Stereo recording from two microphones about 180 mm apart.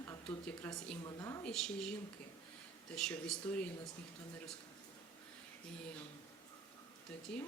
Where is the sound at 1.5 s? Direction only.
5° left (ahead or behind).